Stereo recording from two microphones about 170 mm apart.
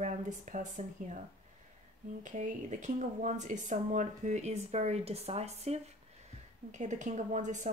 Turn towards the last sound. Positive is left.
turn(degrees=-45)  # may be behind; listen again after turning